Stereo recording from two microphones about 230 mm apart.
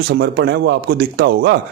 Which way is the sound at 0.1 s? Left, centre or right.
Right.